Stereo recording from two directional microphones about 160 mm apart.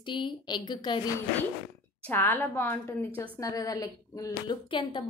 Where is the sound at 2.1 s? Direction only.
10° left (ahead or behind); by 5.1 s 30° left (ahead or behind).